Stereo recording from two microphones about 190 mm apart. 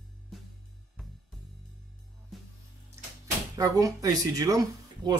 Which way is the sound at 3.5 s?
20° right (ahead or behind).